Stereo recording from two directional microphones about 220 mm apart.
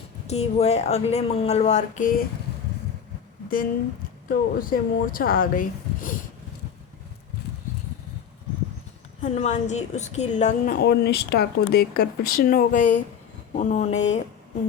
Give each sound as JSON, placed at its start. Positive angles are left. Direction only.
{"t": 0.3, "sound": "speech", "side_deg": 30}
{"t": 4.3, "sound": "speech", "side_deg": 40}
{"t": 9.2, "sound": "speech", "side_deg": 30}
{"t": 10.8, "sound": "speech", "side_deg": 45}